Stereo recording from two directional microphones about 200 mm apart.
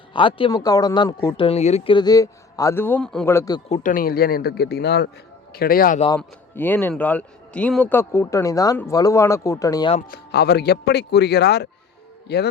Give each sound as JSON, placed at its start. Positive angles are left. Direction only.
{"t": 0.1, "sound": "speech", "side_deg": 25}
{"t": 3.7, "sound": "speech", "side_deg": 45}
{"t": 6.1, "sound": "a man's voice", "side_deg": 10}
{"t": 10.1, "sound": "speech", "side_deg": 55}